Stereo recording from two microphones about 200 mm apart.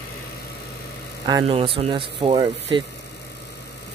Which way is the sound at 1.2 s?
25° right (ahead or behind).